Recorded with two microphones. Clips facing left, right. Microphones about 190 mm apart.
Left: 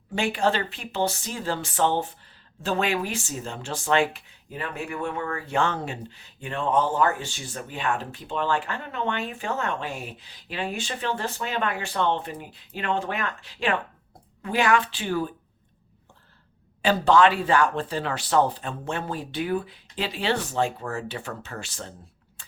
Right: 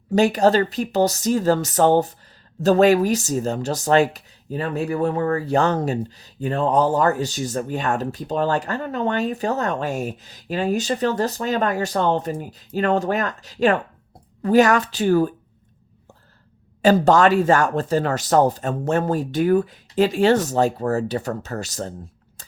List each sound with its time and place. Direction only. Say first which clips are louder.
0.1 s speech: right 8 dB; 40° right (ahead or behind)
16.8 s speech: right 4 dB; 45° right (ahead or behind)
22.4 s a sound: right 4 dB; 40° right (ahead or behind)